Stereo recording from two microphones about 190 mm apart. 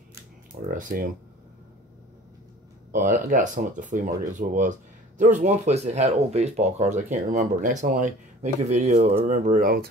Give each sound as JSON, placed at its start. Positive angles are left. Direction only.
{"t": 0.7, "sound": "speech", "side_deg": -45}
{"t": 2.9, "sound": "speech", "side_deg": -45}